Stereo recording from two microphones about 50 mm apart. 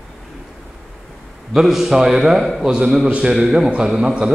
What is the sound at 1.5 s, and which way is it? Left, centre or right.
A man's voice, centre.